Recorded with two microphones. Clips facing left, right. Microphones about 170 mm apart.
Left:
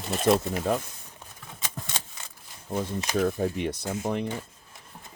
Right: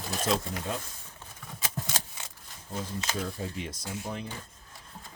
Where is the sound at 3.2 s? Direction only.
55° left (ahead or behind).